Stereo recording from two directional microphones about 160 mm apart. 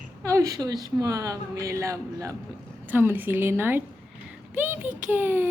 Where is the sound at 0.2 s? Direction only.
20° right (ahead or behind).